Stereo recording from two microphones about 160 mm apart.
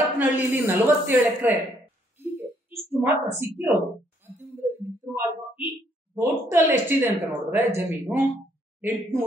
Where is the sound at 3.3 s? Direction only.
15° right (ahead or behind).